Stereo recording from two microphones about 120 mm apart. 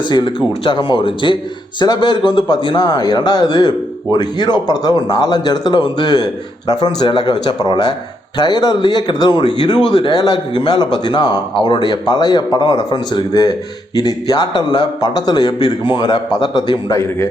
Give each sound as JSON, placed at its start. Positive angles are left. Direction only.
{"t": 0.0, "sound": "speech", "side_deg": 40}